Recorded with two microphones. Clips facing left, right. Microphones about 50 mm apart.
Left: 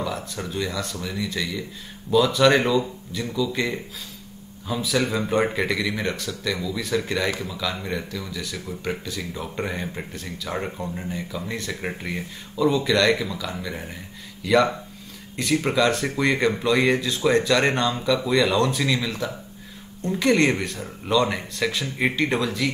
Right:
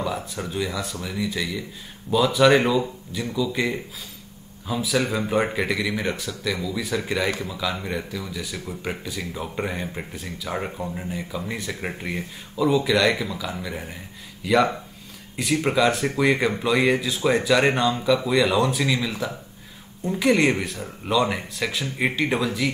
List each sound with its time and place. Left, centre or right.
0.0 s speech: centre